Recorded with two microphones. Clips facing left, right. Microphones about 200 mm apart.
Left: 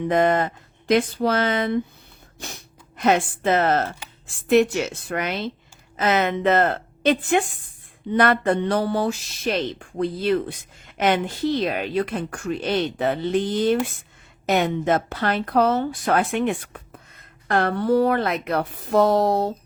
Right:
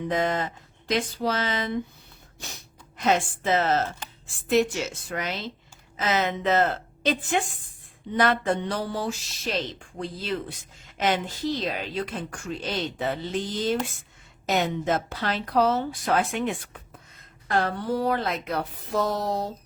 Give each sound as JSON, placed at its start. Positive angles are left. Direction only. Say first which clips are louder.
{"t": 0.1, "sound": "speech", "louder": "left 7 dB", "side_deg": 55}
{"t": 3.0, "sound": "speech", "louder": "left 4 dB", "side_deg": 60}